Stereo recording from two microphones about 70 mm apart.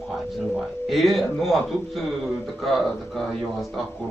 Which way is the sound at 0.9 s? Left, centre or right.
Centre.